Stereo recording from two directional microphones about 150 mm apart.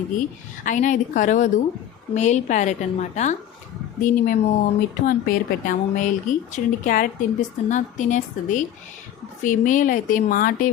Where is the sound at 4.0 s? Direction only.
65° left (ahead or behind).